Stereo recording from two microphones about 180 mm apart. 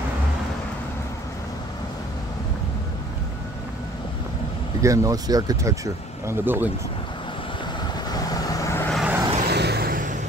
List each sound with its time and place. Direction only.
4.8 s speech: 15° right (ahead or behind)
8.1 s vehicle: 20° left (ahead or behind)
8.9 s vehicle: 5° right (ahead or behind)
9.5 s vehicle: 65° right (ahead or behind)